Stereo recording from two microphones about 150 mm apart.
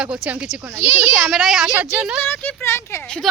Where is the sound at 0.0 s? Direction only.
5° right (ahead or behind).